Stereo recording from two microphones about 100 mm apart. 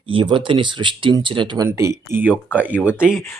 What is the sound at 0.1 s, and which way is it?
Speech, 60° right (ahead or behind).